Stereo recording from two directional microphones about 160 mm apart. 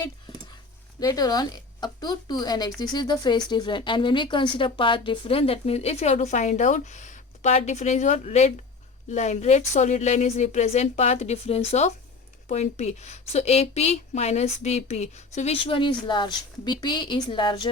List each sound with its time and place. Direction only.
0.9 s a woman's voice: 25° left (ahead or behind)